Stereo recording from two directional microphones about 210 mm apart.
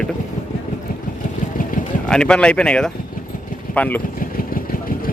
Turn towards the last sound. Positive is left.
turn(degrees=5)  # may be behind; listen again after turning